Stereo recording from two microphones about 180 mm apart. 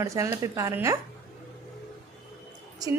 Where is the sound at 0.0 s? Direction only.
15° right (ahead or behind).